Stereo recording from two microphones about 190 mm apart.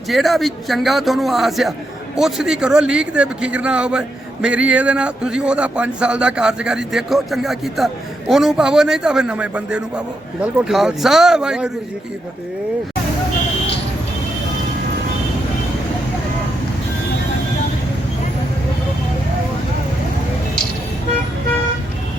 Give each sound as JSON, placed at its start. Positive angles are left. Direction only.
{"t": 0.1, "sound": "a man's voice", "side_deg": 0}